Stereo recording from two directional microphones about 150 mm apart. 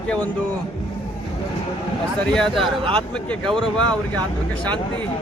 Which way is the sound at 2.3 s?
5° left (ahead or behind).